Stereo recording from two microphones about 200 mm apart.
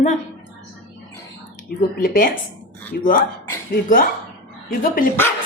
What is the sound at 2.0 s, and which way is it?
Speech, 45° left (ahead or behind).